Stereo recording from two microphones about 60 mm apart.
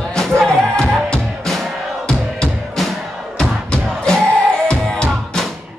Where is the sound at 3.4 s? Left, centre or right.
Centre.